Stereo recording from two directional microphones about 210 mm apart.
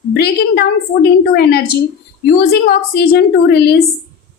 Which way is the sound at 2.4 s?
45° left (ahead or behind).